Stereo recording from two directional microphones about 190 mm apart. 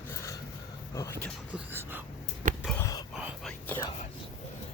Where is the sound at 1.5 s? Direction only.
10° right (ahead or behind).